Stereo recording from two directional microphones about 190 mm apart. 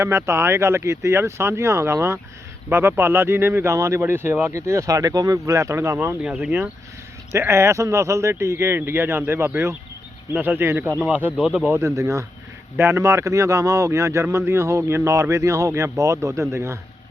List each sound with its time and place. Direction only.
0.0 s speech: 15° right (ahead or behind)